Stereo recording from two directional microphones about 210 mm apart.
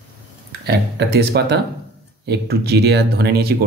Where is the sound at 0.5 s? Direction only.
50° right (ahead or behind).